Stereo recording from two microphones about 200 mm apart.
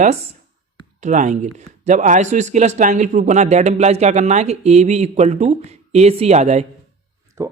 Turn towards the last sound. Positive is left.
turn(degrees=-15)  # may be behind; listen again after turning